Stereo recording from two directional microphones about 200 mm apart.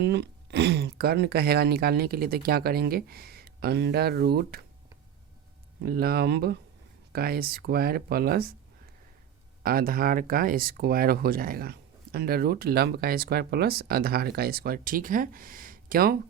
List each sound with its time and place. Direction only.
0.0 s speech: 55° right (ahead or behind)
5.8 s speech: 50° right (ahead or behind)
9.6 s speech: 45° right (ahead or behind)